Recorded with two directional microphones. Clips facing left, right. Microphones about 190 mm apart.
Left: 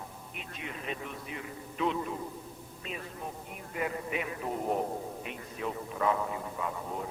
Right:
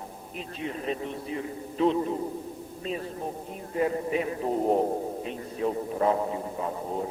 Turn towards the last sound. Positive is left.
turn(degrees=-35)  # may be behind; listen again after turning